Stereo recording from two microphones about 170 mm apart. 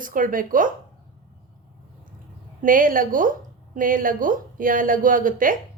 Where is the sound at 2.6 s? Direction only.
55° right (ahead or behind).